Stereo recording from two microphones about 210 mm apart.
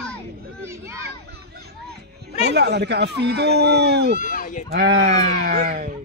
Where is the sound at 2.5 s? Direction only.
50° right (ahead or behind).